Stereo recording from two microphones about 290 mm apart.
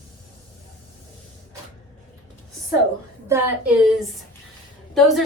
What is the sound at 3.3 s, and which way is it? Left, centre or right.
A woman's voice, centre.